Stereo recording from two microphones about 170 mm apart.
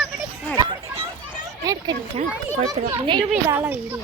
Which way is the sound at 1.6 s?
20° right (ahead or behind).